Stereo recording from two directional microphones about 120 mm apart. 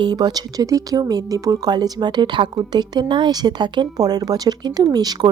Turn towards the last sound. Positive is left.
turn(degrees=-35)  # may be behind; listen again after turning